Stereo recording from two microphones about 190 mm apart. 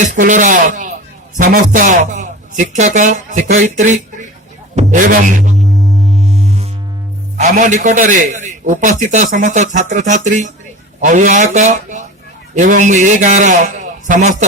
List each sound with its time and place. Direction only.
0.0 s a man's voice: 40° right (ahead or behind)
6.1 s music: 35° right (ahead or behind)
7.3 s a man's voice: 40° right (ahead or behind)